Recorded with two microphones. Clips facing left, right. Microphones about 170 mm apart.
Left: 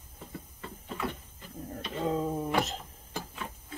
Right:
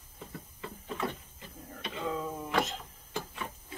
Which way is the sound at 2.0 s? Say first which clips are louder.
Left 5 dB; 35° left (ahead or behind).